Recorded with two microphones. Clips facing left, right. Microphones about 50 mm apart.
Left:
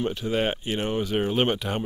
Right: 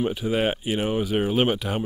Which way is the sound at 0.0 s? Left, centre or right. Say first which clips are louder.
Right 2 dB; centre.